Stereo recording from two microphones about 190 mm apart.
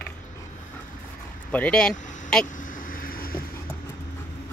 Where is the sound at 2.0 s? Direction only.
40° left (ahead or behind).